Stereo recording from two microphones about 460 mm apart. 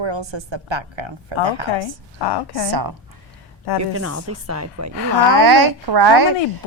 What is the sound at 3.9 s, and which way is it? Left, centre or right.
Speech, right.